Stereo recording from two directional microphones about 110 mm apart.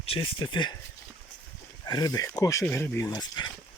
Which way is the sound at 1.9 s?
35° left (ahead or behind).